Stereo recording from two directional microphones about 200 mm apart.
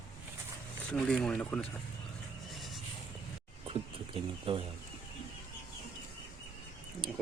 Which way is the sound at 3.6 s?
25° right (ahead or behind).